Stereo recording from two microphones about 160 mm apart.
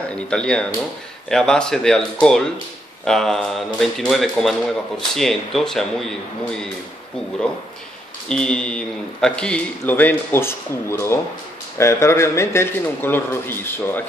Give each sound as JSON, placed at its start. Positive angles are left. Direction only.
{"t": 0.3, "sound": "speech", "side_deg": 5}
{"t": 8.3, "sound": "a man's voice", "side_deg": 5}